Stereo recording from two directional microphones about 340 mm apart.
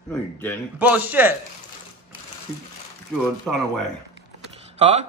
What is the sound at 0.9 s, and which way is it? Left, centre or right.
Speech, centre.